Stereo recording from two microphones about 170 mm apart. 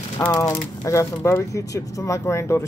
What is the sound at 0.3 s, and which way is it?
Speech, 20° left (ahead or behind).